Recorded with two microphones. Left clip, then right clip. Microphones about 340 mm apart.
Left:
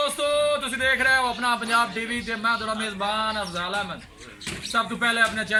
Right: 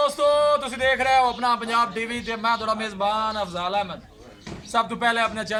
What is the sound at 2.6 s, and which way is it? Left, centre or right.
Speech, centre.